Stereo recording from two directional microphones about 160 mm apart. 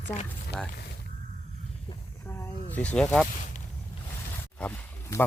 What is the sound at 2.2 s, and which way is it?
Snake, 15° left (ahead or behind).